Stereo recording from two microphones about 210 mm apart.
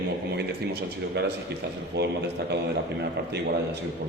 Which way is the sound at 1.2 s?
55° right (ahead or behind).